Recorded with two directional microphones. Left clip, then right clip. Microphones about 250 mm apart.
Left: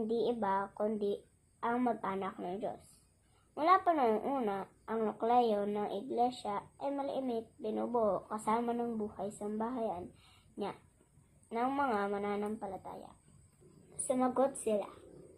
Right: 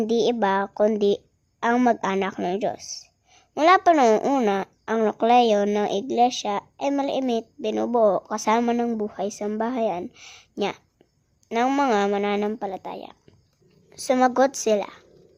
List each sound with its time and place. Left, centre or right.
0.1 s a woman's voice: right
11.4 s a woman's voice: right
14.1 s a woman's voice: right